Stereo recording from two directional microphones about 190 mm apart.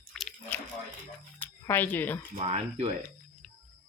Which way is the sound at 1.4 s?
10° left (ahead or behind).